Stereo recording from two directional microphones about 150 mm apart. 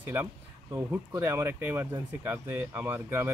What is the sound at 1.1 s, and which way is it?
Speech, 15° right (ahead or behind).